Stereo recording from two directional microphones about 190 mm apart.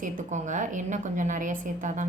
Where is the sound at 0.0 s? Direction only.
40° right (ahead or behind).